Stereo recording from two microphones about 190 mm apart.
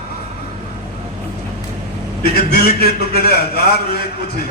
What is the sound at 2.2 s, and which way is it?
A man's voice, 55° left (ahead or behind).